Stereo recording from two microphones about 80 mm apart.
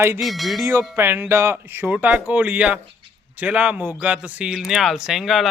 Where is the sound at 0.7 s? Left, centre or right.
Right.